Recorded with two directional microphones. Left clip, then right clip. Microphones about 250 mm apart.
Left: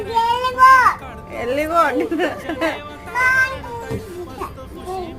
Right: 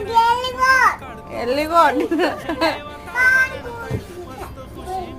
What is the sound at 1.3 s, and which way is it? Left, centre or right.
A woman's voice, centre.